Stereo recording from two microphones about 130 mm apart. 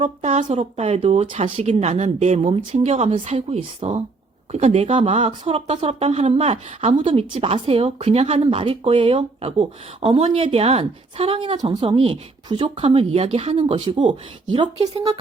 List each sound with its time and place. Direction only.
0.0 s speech: 55° right (ahead or behind)